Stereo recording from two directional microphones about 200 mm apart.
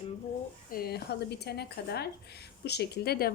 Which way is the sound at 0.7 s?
50° left (ahead or behind).